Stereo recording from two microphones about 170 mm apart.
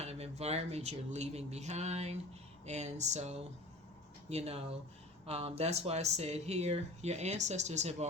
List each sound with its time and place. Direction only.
0.0 s speech: 40° right (ahead or behind)